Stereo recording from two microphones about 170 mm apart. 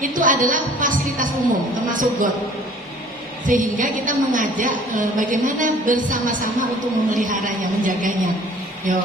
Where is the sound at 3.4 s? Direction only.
50° right (ahead or behind).